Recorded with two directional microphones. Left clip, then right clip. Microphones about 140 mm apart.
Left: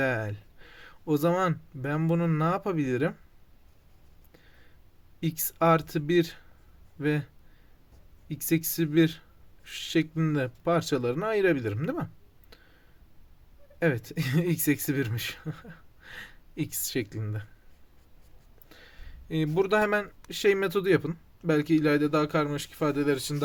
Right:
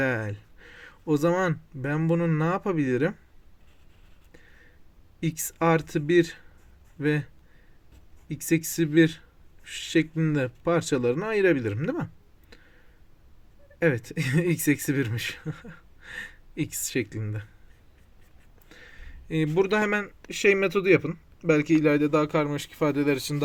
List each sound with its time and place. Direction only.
0.0 s speech: 30° right (ahead or behind)
5.2 s speech: 30° right (ahead or behind)
8.3 s speech: 25° right (ahead or behind)
13.7 s speech: 25° right (ahead or behind)
18.7 s speech: 30° right (ahead or behind)